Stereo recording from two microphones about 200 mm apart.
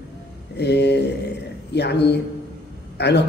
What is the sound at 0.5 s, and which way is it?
A man's voice, 55° left (ahead or behind).